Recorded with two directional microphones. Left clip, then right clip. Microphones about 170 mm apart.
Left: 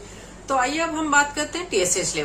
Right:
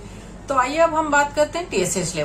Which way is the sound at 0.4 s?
20° left (ahead or behind).